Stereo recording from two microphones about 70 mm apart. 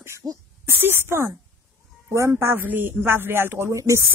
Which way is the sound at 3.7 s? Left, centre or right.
Right.